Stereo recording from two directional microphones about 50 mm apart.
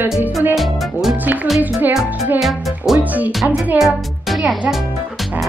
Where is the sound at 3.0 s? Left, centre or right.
Right.